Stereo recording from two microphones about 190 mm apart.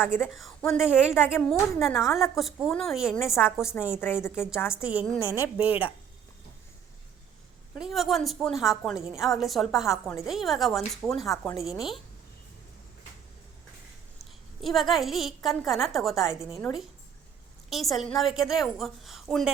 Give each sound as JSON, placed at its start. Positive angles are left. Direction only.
{"t": 0.0, "sound": "a woman's voice", "side_deg": 15}
{"t": 0.3, "sound": "a woman's voice", "side_deg": 0}
{"t": 4.0, "sound": "a woman's voice", "side_deg": 10}
{"t": 4.8, "sound": "a woman's voice", "side_deg": -5}
{"t": 7.8, "sound": "a woman's voice", "side_deg": 0}
{"t": 14.6, "sound": "a woman's voice", "side_deg": 0}
{"t": 17.7, "sound": "a woman's voice", "side_deg": 0}